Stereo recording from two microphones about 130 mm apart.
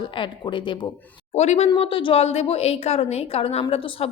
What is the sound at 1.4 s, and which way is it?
Speech, 55° left (ahead or behind).